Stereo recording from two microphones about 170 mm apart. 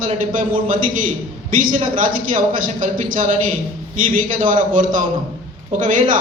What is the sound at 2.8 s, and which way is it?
A man's voice, 50° right (ahead or behind).